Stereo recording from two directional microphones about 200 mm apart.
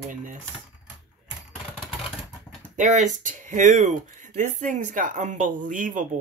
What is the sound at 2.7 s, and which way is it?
Speech, 40° right (ahead or behind).